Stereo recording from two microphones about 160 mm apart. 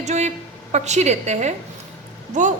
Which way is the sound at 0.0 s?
45° right (ahead or behind).